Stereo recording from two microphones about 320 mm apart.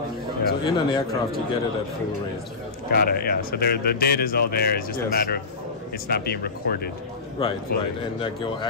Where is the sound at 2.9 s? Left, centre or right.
Left.